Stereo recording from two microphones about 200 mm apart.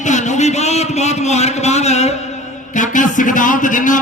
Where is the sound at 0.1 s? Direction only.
35° left (ahead or behind).